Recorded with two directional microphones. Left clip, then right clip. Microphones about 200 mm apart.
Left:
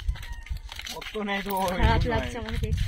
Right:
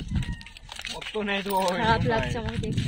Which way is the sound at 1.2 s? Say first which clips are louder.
Right 2 dB; 40° right (ahead or behind).